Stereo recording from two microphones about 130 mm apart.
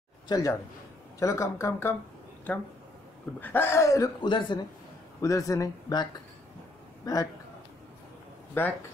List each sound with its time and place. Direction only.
0.3 s speech: 25° left (ahead or behind)
3.3 s speech: 15° left (ahead or behind)
4.3 s speech: 40° left (ahead or behind)
5.2 s speech: 25° left (ahead or behind)
8.6 s speech: 15° left (ahead or behind)